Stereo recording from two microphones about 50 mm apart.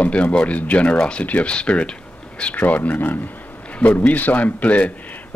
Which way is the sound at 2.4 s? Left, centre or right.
Left.